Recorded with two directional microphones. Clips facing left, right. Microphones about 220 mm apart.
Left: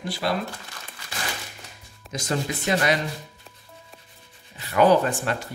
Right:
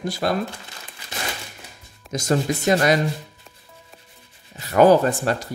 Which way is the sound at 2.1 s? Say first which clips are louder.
Right 6 dB; 45° right (ahead or behind).